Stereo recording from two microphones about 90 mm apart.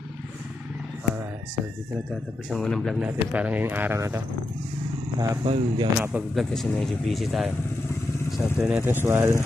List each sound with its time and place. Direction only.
2.5 s speech: 5° left (ahead or behind)
3.0 s speech: 15° right (ahead or behind)
5.4 s speech: 65° right (ahead or behind)
5.9 s speech: 20° right (ahead or behind)
6.3 s speech: 5° left (ahead or behind)
8.5 s speech: 10° right (ahead or behind)
8.8 s speech: 25° right (ahead or behind)